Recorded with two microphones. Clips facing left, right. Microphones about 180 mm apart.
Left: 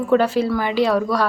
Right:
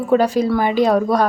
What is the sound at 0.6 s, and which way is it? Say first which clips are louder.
Speech: right 3 dB; 45° right (ahead or behind).